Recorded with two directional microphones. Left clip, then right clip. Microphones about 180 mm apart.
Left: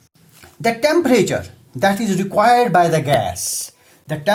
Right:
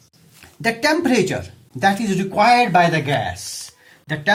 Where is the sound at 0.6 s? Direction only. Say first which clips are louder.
Left 2 dB; 35° left (ahead or behind).